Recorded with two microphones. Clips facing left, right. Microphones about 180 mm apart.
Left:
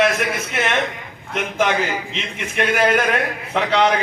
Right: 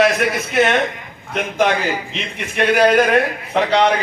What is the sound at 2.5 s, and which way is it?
A man's voice, 35° right (ahead or behind).